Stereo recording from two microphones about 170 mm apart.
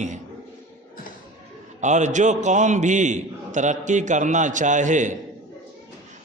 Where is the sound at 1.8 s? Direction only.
45° right (ahead or behind).